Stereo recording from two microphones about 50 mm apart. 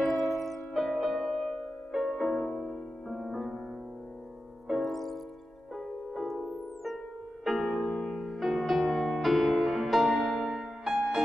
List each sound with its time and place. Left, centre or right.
0.0 s music: centre
2.3 s music: left
2.6 s music: centre
4.8 s music: centre
7.4 s music: centre